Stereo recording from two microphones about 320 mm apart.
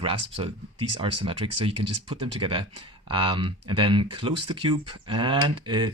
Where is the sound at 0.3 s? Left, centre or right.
Centre.